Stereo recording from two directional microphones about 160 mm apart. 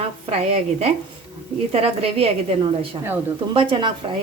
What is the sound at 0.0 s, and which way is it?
A woman's voice, 40° right (ahead or behind).